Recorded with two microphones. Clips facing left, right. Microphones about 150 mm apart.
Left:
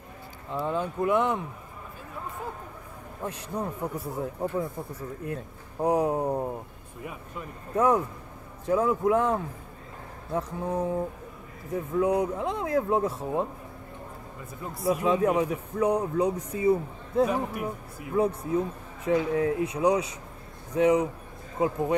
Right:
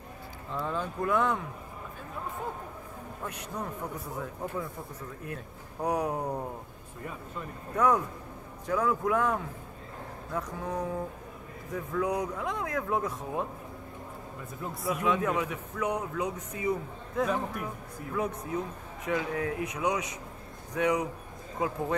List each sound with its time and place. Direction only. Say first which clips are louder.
0.5 s speech: left 4 dB; 30° left (ahead or behind)
3.3 s speech: left 5 dB; 30° left (ahead or behind)
7.0 s speech: left 1 dB; 10° left (ahead or behind)
7.7 s speech: left 3 dB; 25° left (ahead or behind)
14.6 s speech: left 1 dB; centre (ahead or behind)
15.0 s speech: left 4 dB; 30° left (ahead or behind)